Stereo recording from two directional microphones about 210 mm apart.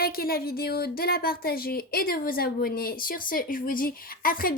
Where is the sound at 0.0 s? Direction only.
45° left (ahead or behind).